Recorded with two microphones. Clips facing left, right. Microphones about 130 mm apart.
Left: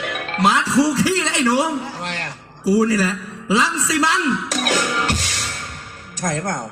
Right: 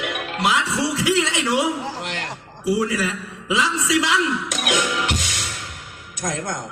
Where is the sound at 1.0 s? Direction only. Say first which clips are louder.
Left 2 dB; 40° left (ahead or behind).